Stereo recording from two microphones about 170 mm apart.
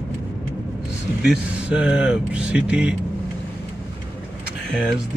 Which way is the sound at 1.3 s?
5° right (ahead or behind).